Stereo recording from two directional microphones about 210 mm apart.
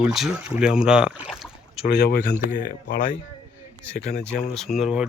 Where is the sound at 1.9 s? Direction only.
50° left (ahead or behind).